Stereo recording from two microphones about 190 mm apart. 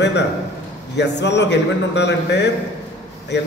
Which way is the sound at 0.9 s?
65° left (ahead or behind).